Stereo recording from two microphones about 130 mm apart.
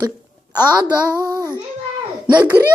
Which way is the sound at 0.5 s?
30° right (ahead or behind).